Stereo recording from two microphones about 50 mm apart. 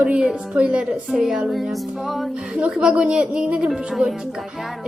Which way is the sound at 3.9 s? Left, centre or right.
Centre.